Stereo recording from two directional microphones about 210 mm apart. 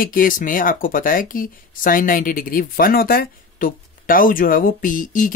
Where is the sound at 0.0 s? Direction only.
40° left (ahead or behind).